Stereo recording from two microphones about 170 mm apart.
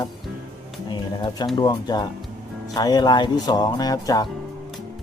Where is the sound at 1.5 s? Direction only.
25° left (ahead or behind).